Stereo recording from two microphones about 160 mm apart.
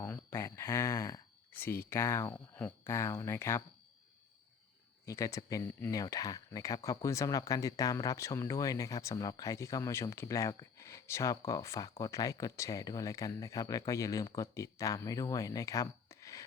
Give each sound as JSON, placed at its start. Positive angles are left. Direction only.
{"t": 0.0, "sound": "a sound", "side_deg": 15}
{"t": 2.6, "sound": "speech", "side_deg": 20}
{"t": 5.0, "sound": "speech", "side_deg": 20}